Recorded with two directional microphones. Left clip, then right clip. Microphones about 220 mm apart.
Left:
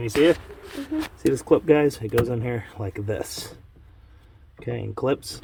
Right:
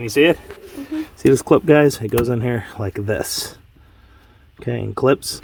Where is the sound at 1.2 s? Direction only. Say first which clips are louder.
Right 7 dB; 55° right (ahead or behind).